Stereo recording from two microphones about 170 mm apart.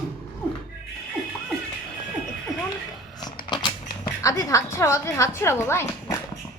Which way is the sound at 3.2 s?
25° left (ahead or behind).